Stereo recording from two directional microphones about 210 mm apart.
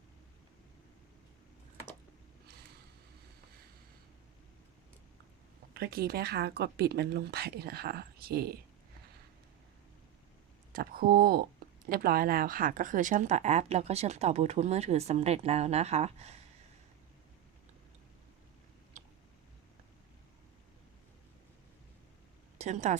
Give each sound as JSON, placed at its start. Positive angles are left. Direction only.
{"t": 5.7, "sound": "speech", "side_deg": -45}
{"t": 10.7, "sound": "speech", "side_deg": -45}
{"t": 19.0, "sound": "a sound", "side_deg": -35}
{"t": 22.5, "sound": "a woman's voice", "side_deg": -35}